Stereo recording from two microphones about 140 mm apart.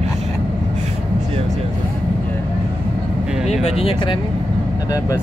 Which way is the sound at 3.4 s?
45° left (ahead or behind).